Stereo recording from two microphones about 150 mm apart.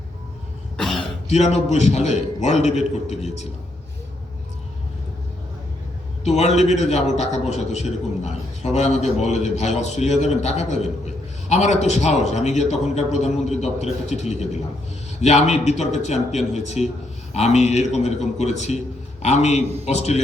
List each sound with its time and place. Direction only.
0.8 s cough: 5° left (ahead or behind)
1.3 s a man's voice: 45° left (ahead or behind)
6.2 s a man's voice: 50° left (ahead or behind)